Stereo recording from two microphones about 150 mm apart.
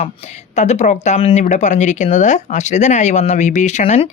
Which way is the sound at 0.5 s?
50° left (ahead or behind).